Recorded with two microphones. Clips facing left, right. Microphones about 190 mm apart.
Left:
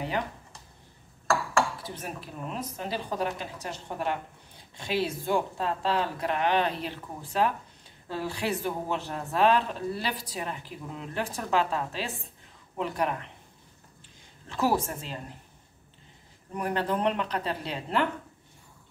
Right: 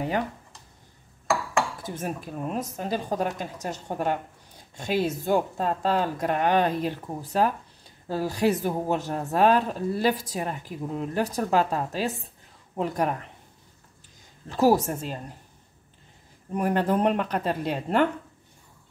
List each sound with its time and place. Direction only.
1.8 s speech: 45° right (ahead or behind)
14.5 s speech: 40° right (ahead or behind)
16.5 s speech: 45° right (ahead or behind)